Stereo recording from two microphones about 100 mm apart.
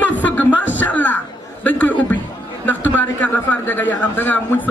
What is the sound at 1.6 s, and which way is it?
A man's voice, 15° left (ahead or behind).